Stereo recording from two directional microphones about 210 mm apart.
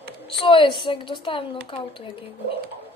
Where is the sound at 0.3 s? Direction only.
25° left (ahead or behind).